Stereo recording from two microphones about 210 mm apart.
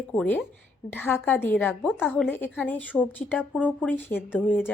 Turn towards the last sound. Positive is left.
turn(degrees=10)  # may be behind; listen again after turning